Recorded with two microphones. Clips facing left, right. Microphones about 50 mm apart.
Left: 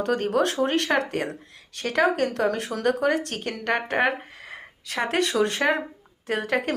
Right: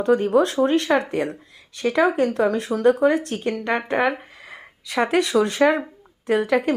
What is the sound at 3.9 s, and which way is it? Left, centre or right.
Speech, left.